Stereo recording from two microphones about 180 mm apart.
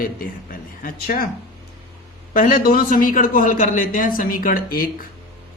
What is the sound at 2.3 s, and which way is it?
A man's voice, 50° left (ahead or behind).